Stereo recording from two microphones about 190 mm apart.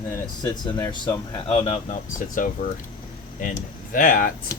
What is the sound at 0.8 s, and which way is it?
Speech, 20° left (ahead or behind).